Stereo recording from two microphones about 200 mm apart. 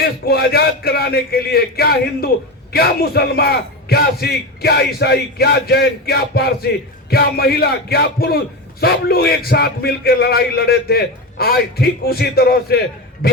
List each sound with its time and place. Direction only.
0.0 s a man's voice: 50° left (ahead or behind)